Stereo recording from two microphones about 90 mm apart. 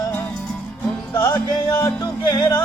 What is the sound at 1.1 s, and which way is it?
Music, 45° left (ahead or behind).